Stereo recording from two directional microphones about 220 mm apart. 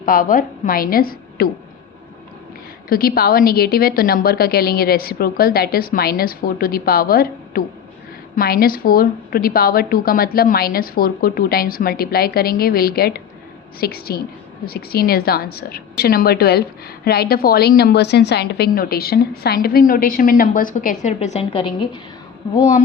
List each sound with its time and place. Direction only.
0.0 s a woman's voice: 40° left (ahead or behind)
2.9 s a woman's voice: 45° left (ahead or behind); by 22.0 s 25° left (ahead or behind)